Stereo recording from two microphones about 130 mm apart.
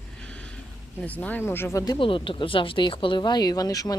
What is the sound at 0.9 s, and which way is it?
Speech, 10° left (ahead or behind).